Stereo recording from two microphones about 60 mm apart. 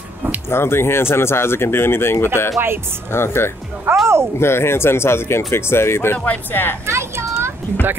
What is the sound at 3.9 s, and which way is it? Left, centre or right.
Music, right.